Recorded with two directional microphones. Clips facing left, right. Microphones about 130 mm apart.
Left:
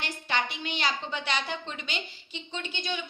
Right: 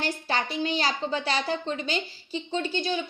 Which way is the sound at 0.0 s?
35° right (ahead or behind).